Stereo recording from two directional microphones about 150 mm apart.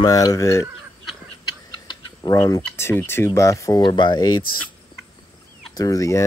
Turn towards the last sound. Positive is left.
turn(degrees=20)  # may be behind; listen again after turning